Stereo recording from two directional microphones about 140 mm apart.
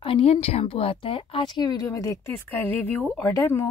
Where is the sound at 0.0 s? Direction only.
45° left (ahead or behind).